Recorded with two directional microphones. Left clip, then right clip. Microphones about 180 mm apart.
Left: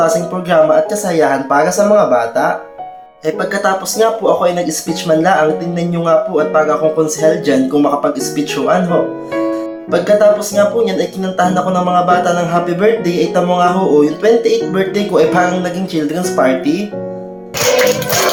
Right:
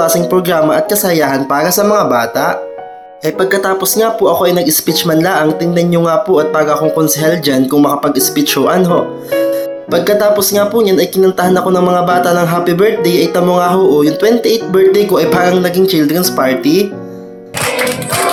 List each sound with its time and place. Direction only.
0.0 s speech: 35° right (ahead or behind)
9.9 s speech: 35° right (ahead or behind)